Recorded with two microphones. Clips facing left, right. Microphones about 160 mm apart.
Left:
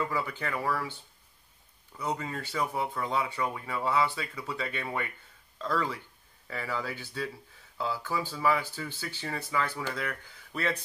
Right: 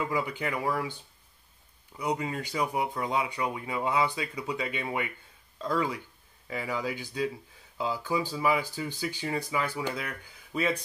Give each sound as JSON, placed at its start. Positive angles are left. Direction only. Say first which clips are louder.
{"t": 0.0, "sound": "speech", "louder": "right 2 dB", "side_deg": -15}
{"t": 2.0, "sound": "speech", "louder": "right 3 dB", "side_deg": -15}